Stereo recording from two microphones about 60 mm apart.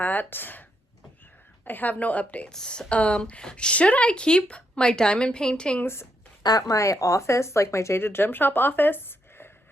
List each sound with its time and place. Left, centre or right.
0.0 s speech: left
1.6 s a woman's voice: left
2.5 s a woman's voice: centre
5.8 s speech: left
6.5 s speech: left